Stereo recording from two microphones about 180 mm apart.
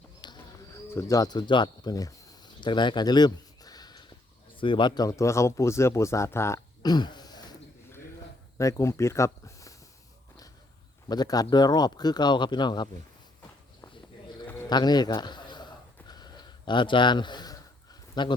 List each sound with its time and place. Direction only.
0.2 s bird: 25° left (ahead or behind)
0.9 s speech: 15° left (ahead or behind)
11.1 s speech: 20° left (ahead or behind)
13.8 s walk: 25° left (ahead or behind)
14.7 s a sound: 25° left (ahead or behind)
18.1 s speech: 25° left (ahead or behind)